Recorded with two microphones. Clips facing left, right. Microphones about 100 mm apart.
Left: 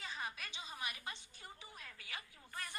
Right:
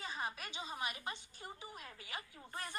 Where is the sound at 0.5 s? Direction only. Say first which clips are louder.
Right 4 dB; 35° right (ahead or behind).